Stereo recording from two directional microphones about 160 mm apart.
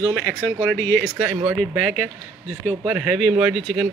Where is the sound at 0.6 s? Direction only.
10° left (ahead or behind).